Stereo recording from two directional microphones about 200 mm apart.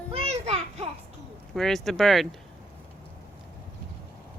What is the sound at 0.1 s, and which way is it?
Children playing, 30° right (ahead or behind).